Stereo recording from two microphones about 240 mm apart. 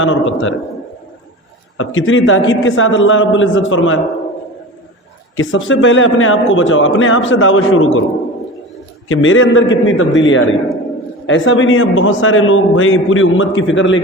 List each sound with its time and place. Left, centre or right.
0.0 s a man's voice: left
1.8 s a man's voice: left
5.4 s a man's voice: left
9.0 s a man's voice: left